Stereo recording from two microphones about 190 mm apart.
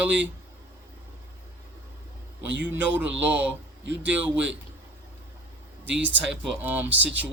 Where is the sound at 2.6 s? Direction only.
10° right (ahead or behind).